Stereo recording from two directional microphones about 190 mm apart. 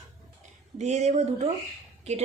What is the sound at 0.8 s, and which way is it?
Speech, 35° right (ahead or behind).